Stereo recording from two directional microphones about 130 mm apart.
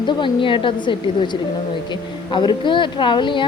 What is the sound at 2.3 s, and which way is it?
Speech, 35° left (ahead or behind).